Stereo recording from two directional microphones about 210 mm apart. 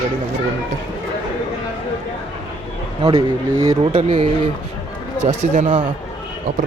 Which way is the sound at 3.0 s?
25° right (ahead or behind).